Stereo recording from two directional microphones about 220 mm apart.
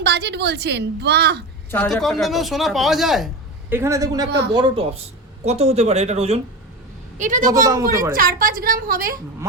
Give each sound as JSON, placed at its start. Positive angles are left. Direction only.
{"t": 0.0, "sound": "a woman's voice", "side_deg": -50}
{"t": 1.7, "sound": "speech", "side_deg": 5}
{"t": 3.7, "sound": "a woman's voice", "side_deg": -10}
{"t": 4.3, "sound": "a woman's voice", "side_deg": -50}
{"t": 4.5, "sound": "a woman's voice", "side_deg": -25}
{"t": 7.7, "sound": "a woman's voice", "side_deg": -15}
{"t": 8.1, "sound": "a woman's voice", "side_deg": -40}